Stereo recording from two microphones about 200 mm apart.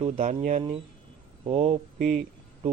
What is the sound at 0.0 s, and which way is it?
Speech, 30° right (ahead or behind).